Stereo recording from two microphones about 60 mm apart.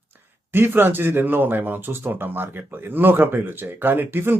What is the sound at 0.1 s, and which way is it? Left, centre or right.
Speech, right.